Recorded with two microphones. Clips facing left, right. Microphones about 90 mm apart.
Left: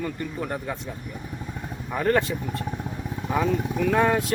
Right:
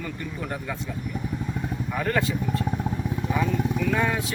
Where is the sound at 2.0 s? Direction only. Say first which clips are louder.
Left 3 dB; 35° left (ahead or behind).